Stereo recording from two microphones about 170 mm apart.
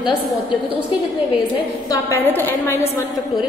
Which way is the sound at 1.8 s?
20° left (ahead or behind).